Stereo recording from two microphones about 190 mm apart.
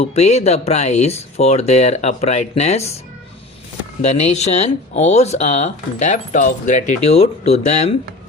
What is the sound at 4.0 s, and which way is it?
Speech, 35° left (ahead or behind).